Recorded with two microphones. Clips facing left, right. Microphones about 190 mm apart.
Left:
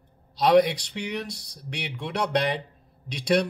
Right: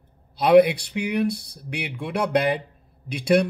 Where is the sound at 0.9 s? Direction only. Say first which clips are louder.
Right 8 dB; 5° right (ahead or behind).